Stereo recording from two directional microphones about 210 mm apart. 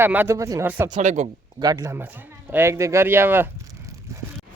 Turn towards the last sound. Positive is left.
turn(degrees=-10)  # may be behind; listen again after turning